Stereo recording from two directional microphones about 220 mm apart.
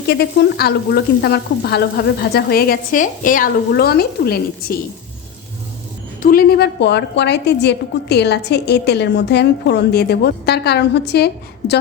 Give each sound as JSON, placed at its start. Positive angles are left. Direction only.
{"t": 0.1, "sound": "a woman's voice", "side_deg": 45}
{"t": 6.2, "sound": "a woman's voice", "side_deg": 45}